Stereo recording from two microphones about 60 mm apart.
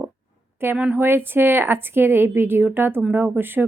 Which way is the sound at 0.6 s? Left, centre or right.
Right.